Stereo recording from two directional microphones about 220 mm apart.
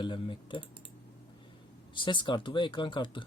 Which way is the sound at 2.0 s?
20° left (ahead or behind).